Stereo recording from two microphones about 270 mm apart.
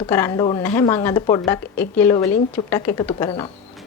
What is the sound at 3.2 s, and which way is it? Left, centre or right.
Speech, centre.